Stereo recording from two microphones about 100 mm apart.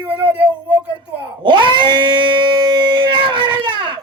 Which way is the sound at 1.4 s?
55° right (ahead or behind).